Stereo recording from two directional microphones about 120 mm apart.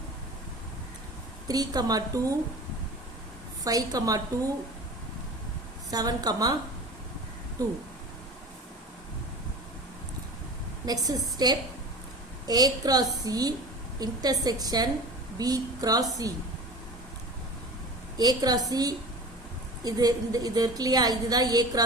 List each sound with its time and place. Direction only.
1.5 s a woman's voice: 30° right (ahead or behind)
3.6 s a woman's voice: 30° right (ahead or behind)
5.9 s a woman's voice: 30° right (ahead or behind)
7.6 s a woman's voice: 30° right (ahead or behind)
10.8 s a woman's voice: 30° right (ahead or behind)
18.2 s a woman's voice: 35° right (ahead or behind)